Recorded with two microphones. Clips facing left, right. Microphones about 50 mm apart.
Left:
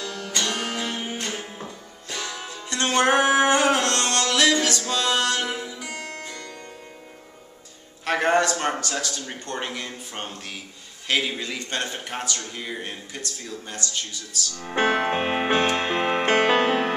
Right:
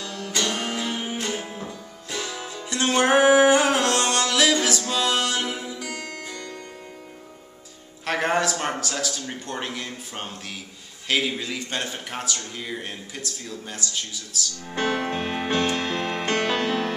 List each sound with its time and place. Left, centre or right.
0.0 s music: centre
8.0 s a man's voice: centre
14.6 s music: left